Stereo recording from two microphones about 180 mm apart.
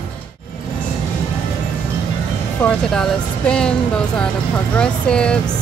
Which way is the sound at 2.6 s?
5° left (ahead or behind).